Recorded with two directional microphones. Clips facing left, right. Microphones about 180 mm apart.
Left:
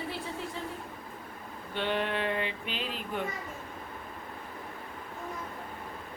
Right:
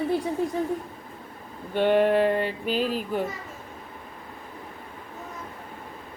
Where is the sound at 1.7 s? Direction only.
45° right (ahead or behind).